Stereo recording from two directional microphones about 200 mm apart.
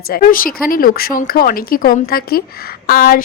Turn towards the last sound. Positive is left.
turn(degrees=45)  # may be behind; listen again after turning